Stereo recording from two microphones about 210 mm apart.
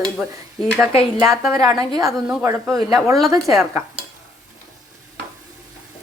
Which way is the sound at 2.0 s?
Centre (ahead or behind).